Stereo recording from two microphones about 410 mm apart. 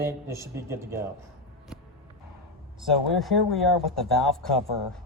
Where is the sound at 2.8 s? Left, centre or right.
Centre.